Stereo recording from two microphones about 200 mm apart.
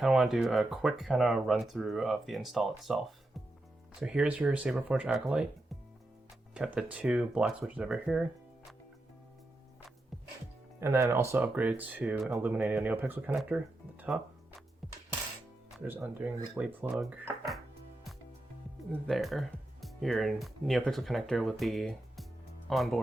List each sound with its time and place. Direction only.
0.0 s speech: centre (ahead or behind)
6.5 s speech: 5° right (ahead or behind)
10.8 s speech: 15° right (ahead or behind)
15.9 s speech: 10° right (ahead or behind)
18.9 s speech: centre (ahead or behind)